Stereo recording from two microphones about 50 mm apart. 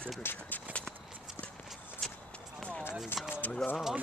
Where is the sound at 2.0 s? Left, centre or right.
Centre.